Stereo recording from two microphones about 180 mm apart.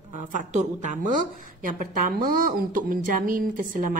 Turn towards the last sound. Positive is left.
turn(degrees=-50)  # may be behind; listen again after turning